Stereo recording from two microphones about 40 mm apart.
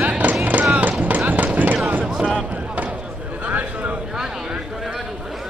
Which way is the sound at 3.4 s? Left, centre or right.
Right.